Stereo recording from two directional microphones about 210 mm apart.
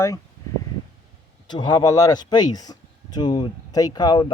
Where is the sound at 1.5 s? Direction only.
20° left (ahead or behind).